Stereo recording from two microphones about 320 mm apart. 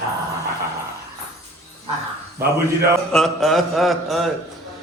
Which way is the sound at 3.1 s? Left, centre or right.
Centre.